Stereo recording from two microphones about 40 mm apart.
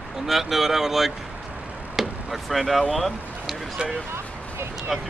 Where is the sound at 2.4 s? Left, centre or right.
Centre.